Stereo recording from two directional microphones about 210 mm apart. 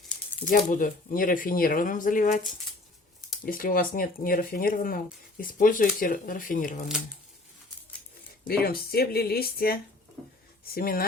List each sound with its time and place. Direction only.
0.0 s a sound: 5° left (ahead or behind)
0.4 s speech: 40° left (ahead or behind)
3.4 s speech: 40° left (ahead or behind)
8.4 s speech: 45° left (ahead or behind)